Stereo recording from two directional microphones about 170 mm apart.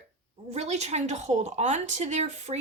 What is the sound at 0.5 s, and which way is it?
A woman's voice, 40° right (ahead or behind).